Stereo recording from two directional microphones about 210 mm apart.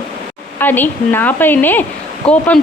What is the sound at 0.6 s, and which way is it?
A woman's voice, 10° left (ahead or behind).